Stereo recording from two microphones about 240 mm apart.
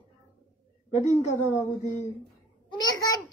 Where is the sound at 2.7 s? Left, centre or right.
Centre.